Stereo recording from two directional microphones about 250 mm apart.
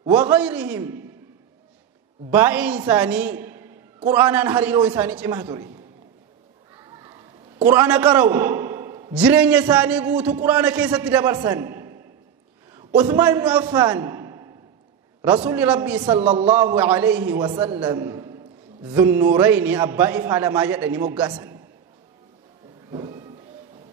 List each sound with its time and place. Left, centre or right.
0.2 s a man's voice: centre
2.3 s a man's voice: centre
6.7 s children playing: centre
7.7 s a man's voice: centre
16.0 s a man's voice: centre
22.8 s music: centre